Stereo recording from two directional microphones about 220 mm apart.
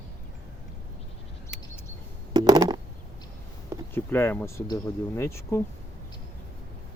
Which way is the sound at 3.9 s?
10° left (ahead or behind).